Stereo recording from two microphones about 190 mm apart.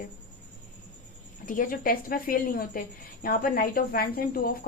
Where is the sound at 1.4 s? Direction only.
45° left (ahead or behind).